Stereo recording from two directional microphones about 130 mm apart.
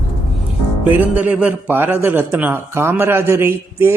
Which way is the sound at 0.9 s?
15° right (ahead or behind).